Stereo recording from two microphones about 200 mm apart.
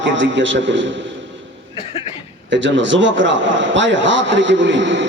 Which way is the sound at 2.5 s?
65° right (ahead or behind).